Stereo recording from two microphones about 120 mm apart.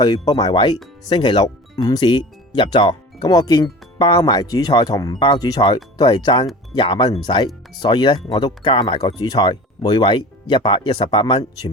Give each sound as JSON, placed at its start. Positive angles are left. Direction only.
{"t": 0.0, "sound": "speech", "side_deg": 35}